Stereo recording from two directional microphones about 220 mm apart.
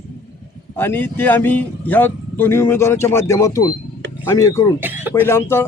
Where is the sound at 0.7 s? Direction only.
10° left (ahead or behind).